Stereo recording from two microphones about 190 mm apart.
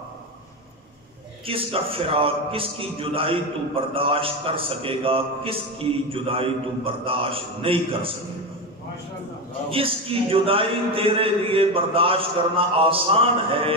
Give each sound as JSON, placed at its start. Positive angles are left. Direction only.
{"t": 1.4, "sound": "a man's voice", "side_deg": -30}
{"t": 9.7, "sound": "a man's voice", "side_deg": -30}